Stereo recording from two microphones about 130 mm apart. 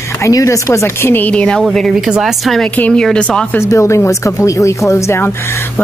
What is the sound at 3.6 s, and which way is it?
Speech, 20° left (ahead or behind).